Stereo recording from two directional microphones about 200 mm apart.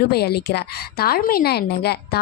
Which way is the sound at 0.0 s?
55° left (ahead or behind).